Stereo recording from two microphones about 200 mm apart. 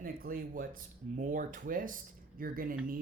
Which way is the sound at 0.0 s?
45° right (ahead or behind).